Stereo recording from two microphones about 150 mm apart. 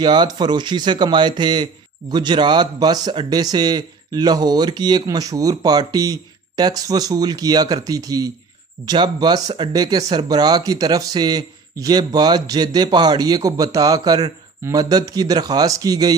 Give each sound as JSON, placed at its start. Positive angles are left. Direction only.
{"t": 0.0, "sound": "speech", "side_deg": -30}